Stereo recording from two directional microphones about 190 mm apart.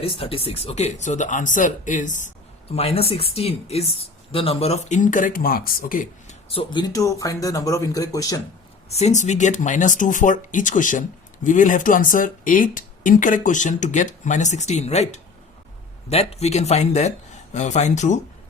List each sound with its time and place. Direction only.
0.0 s speech: 30° left (ahead or behind); by 6.3 s 45° left (ahead or behind)
6.5 s speech: 25° left (ahead or behind)
8.9 s speech: 35° left (ahead or behind)